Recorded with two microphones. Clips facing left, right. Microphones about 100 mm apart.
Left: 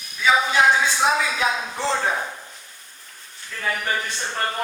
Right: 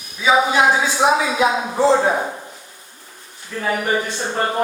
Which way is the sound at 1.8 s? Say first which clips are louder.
Right 8 dB; 20° right (ahead or behind).